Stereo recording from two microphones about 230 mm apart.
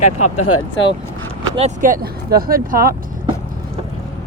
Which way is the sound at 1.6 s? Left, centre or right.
Right.